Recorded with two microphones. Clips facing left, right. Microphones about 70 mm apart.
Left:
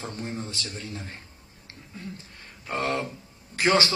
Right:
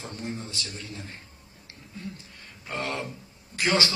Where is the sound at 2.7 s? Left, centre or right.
Left.